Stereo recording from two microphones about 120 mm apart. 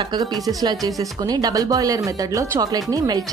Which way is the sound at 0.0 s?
35° right (ahead or behind).